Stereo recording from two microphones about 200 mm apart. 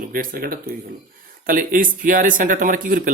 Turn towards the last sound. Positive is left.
turn(degrees=-45)  # may be behind; listen again after turning